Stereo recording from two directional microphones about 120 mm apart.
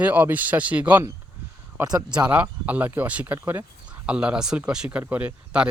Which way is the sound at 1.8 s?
30° right (ahead or behind).